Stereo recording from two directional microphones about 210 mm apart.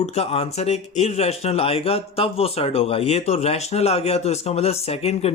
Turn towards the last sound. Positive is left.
turn(degrees=30)  # may be behind; listen again after turning